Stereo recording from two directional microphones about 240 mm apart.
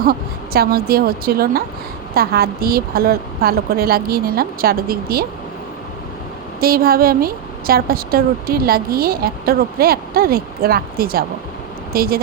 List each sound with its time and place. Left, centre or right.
0.0 s a woman's voice: right
6.6 s a woman's voice: right